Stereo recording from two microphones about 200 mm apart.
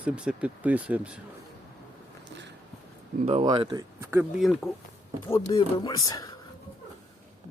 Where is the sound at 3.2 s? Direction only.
30° right (ahead or behind); by 4.2 s 15° right (ahead or behind).